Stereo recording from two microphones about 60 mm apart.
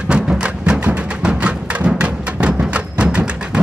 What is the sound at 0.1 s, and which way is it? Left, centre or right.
Music, centre.